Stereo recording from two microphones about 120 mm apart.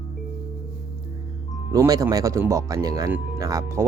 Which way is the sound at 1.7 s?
30° right (ahead or behind).